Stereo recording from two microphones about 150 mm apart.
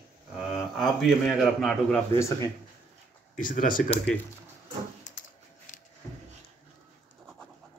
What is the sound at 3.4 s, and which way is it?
Speech, 65° left (ahead or behind).